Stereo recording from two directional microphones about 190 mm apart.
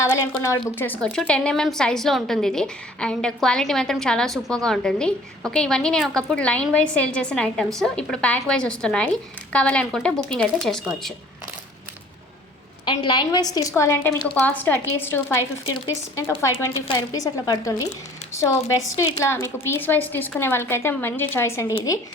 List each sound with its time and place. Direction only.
0.1 s a woman's voice: 15° left (ahead or behind)
12.8 s a woman's voice: 25° left (ahead or behind)
18.9 s a woman's voice: 15° left (ahead or behind)